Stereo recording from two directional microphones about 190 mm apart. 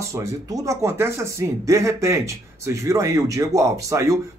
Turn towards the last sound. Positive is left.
turn(degrees=-15)  # may be behind; listen again after turning